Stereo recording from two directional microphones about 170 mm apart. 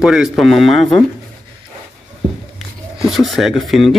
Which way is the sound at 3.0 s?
Centre (ahead or behind).